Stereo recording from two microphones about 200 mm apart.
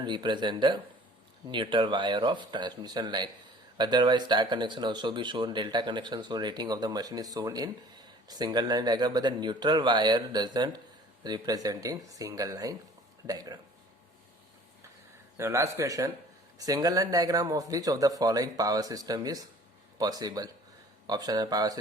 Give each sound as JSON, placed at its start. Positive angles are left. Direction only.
{"t": 0.0, "sound": "speech", "side_deg": -20}
{"t": 15.4, "sound": "speech", "side_deg": -15}